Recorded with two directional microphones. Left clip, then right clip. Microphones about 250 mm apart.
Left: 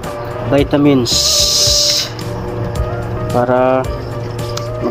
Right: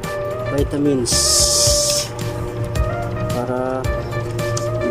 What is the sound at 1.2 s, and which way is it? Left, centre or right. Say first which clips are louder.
Music: left 2 dB; right.